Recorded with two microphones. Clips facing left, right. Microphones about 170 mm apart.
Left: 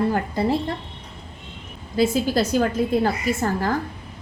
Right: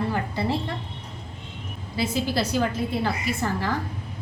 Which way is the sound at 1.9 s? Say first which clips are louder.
Left 6 dB; 45° left (ahead or behind).